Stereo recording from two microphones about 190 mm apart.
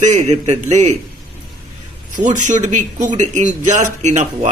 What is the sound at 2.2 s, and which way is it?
Speech, 40° right (ahead or behind).